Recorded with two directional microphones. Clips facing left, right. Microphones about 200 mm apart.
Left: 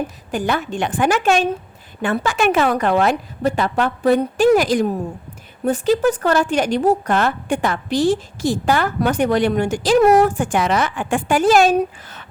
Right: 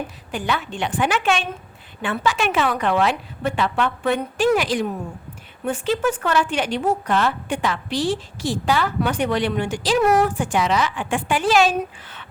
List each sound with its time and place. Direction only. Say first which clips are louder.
0.3 s a woman's voice: left 4 dB; 45° left (ahead or behind)